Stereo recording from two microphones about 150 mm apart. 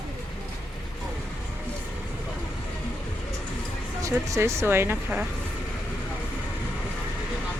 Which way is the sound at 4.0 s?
20° right (ahead or behind).